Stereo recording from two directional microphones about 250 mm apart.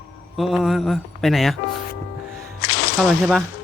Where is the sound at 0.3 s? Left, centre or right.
Centre.